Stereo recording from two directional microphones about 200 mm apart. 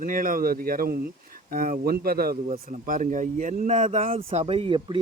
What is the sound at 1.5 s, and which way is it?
Speech, 45° right (ahead or behind).